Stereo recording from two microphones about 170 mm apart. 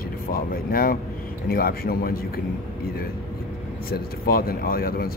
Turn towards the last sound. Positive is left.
turn(degrees=60)  # may be behind; listen again after turning